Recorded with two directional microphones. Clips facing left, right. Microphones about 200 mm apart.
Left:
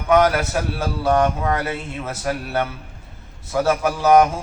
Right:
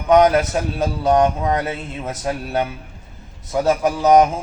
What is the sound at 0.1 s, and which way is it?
A man's voice, 20° right (ahead or behind).